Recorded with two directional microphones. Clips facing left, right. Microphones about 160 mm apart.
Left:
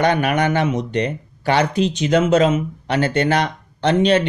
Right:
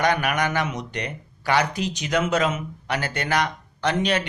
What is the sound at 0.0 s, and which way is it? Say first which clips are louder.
Speech: left 5 dB; 25° left (ahead or behind).